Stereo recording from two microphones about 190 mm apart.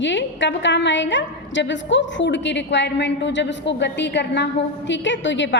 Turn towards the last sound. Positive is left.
turn(degrees=70)  # may be behind; listen again after turning